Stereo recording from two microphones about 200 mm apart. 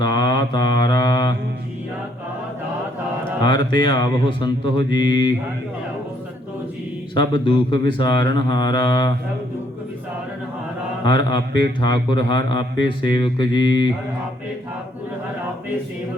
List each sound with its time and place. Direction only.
0.1 s mantra: 20° left (ahead or behind)
3.4 s speech: 20° left (ahead or behind)
7.1 s speech: 25° left (ahead or behind)
11.0 s speech: 20° left (ahead or behind)